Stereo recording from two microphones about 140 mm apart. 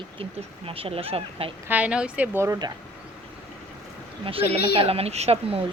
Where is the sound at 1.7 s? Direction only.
10° right (ahead or behind).